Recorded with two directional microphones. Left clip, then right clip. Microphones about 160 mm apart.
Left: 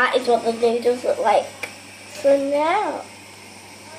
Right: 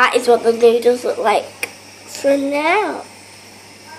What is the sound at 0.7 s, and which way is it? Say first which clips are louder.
Speech: right 6 dB; 45° right (ahead or behind).